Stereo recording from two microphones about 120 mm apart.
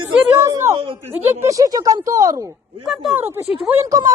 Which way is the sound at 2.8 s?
Centre (ahead or behind).